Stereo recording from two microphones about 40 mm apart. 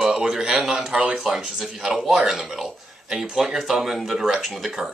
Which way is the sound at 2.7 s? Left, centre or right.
Centre.